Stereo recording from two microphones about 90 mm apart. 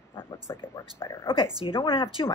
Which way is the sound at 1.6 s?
80° left.